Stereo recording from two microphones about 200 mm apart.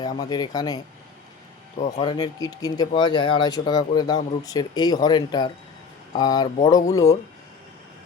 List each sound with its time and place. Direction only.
0.0 s speech: 20° left (ahead or behind)
1.8 s speech: 25° left (ahead or behind)